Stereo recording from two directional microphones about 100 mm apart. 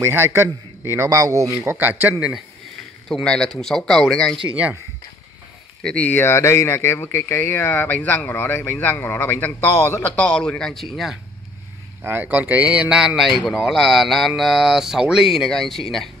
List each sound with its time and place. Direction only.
0.0 s a man's voice: 25° right (ahead or behind); by 2.4 s 10° right (ahead or behind)
3.1 s speech: 5° left (ahead or behind)
4.5 s a man's voice: 15° right (ahead or behind)
5.8 s speech: 10° left (ahead or behind)
10.1 s speech: 10° left (ahead or behind)
12.0 s a man's voice: 20° right (ahead or behind); by 16.1 s centre (ahead or behind)